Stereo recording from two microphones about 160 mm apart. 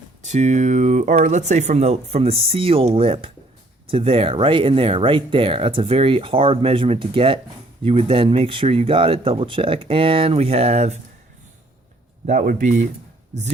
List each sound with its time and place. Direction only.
0.2 s speech: 50° right (ahead or behind)
12.2 s speech: 50° right (ahead or behind)